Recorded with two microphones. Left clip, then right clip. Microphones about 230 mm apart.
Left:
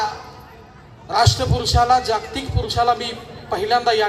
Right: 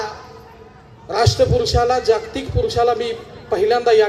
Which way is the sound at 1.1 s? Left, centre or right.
Left.